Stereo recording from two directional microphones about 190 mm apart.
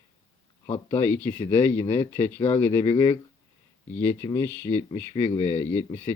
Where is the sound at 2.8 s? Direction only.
25° left (ahead or behind).